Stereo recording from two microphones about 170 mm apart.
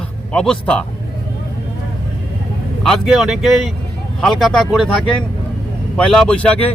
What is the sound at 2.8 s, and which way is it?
A man's voice, centre (ahead or behind).